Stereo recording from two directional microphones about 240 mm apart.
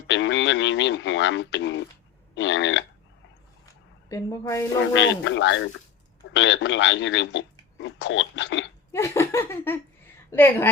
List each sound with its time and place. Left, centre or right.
0.1 s radio: left
2.3 s speech: left
4.1 s a woman's voice: centre
4.9 s speech: left
8.9 s speech: centre